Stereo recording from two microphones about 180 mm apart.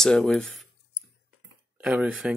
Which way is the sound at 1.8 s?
5° right (ahead or behind).